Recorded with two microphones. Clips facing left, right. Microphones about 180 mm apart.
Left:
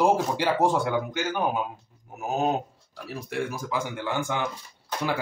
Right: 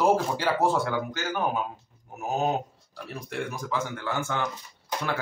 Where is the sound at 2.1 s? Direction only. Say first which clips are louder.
Left 1 dB; centre (ahead or behind).